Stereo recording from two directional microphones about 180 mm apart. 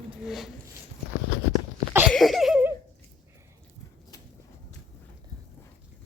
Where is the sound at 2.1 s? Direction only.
Centre (ahead or behind).